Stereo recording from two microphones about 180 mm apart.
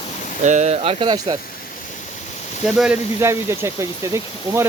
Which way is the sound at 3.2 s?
15° right (ahead or behind).